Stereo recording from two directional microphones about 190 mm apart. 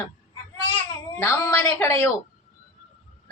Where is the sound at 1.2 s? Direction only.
15° left (ahead or behind).